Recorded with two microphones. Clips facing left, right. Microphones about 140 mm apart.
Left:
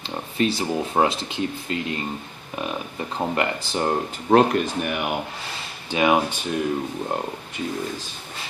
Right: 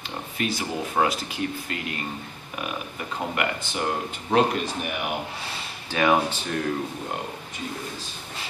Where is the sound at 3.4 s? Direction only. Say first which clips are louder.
Left 2 dB; 35° left (ahead or behind).